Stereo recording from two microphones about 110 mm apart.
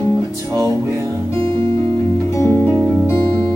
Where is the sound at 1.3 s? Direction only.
55° right (ahead or behind).